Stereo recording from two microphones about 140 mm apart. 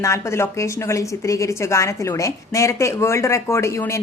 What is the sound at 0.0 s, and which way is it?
A woman's voice, 20° left (ahead or behind).